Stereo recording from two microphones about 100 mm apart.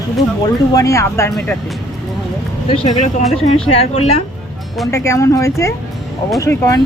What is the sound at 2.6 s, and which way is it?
Speech, 55° left (ahead or behind).